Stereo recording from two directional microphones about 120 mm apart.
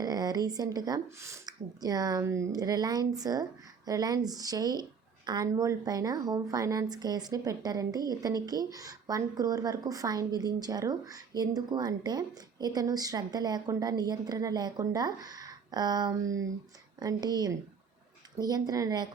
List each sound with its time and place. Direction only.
0.0 s a woman's voice: 35° right (ahead or behind)